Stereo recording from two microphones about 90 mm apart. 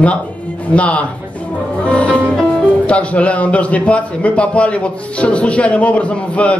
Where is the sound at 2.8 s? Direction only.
15° left (ahead or behind).